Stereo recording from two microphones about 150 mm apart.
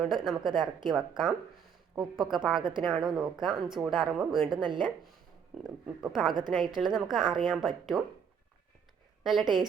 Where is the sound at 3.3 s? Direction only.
30° right (ahead or behind).